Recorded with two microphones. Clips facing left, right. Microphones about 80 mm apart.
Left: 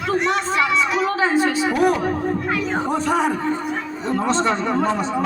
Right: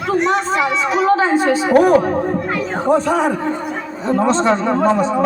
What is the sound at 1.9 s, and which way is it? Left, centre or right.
Speech, right.